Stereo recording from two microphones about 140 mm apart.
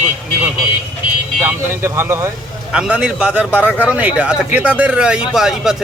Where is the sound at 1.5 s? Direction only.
15° right (ahead or behind).